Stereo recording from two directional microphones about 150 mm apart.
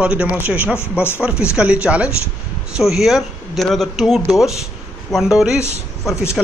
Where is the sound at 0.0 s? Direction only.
5° right (ahead or behind).